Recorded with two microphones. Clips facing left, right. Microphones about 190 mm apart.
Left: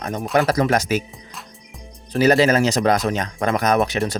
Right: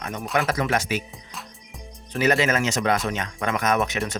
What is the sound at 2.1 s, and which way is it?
Speech, 35° left (ahead or behind).